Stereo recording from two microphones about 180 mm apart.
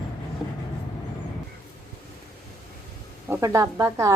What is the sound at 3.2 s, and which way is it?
Speech, 15° right (ahead or behind).